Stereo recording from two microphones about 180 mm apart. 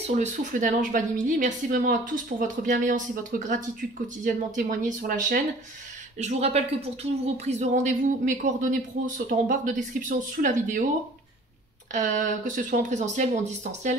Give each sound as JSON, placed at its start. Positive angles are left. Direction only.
{"t": 0.0, "sound": "speech", "side_deg": -40}
{"t": 6.1, "sound": "speech", "side_deg": -35}
{"t": 11.9, "sound": "speech", "side_deg": -45}